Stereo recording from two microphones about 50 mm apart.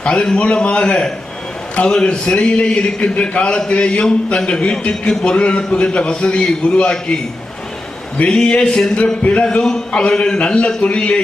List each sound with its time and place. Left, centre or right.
0.0 s a man's voice: centre
8.4 s a sound: centre
9.2 s speech: left